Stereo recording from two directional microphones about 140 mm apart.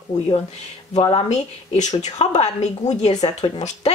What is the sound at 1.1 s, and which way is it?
A woman's voice, 55° left (ahead or behind).